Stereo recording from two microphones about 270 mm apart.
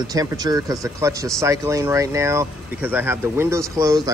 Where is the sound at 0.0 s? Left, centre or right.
Centre.